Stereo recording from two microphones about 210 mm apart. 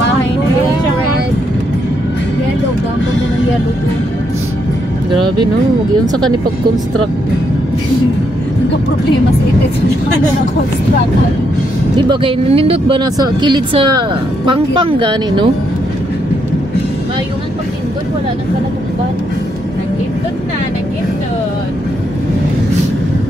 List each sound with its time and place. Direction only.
12.1 s speech: 25° right (ahead or behind)